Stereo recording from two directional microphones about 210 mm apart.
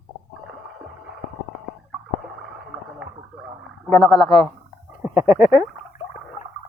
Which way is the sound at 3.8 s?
Centre (ahead or behind).